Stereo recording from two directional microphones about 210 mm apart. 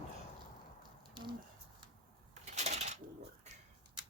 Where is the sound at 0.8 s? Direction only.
20° right (ahead or behind).